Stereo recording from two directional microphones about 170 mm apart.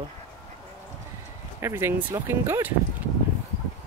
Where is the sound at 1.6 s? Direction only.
15° right (ahead or behind).